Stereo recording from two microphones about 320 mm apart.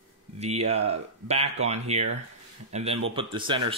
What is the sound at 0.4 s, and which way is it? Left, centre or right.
Speech, centre.